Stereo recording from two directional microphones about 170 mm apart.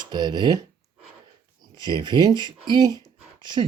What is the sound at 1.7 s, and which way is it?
Speech, 25° right (ahead or behind).